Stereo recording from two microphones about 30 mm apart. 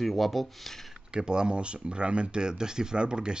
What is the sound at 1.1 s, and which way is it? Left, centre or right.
Speech, right.